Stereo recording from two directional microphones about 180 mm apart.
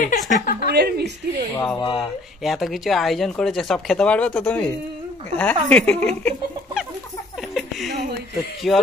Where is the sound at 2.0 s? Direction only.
Centre (ahead or behind).